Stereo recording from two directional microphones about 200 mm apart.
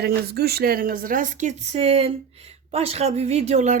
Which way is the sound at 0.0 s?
50° right (ahead or behind).